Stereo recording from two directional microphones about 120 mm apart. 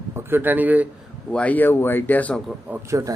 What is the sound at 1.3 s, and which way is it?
Speech, 15° left (ahead or behind).